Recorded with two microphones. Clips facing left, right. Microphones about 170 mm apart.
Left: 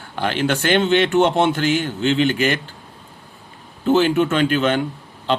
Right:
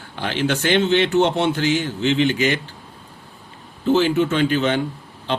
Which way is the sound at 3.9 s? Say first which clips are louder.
Left 1 dB; 50° left (ahead or behind).